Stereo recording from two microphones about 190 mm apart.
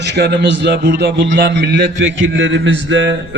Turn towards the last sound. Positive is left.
turn(degrees=-75)  # may be behind; listen again after turning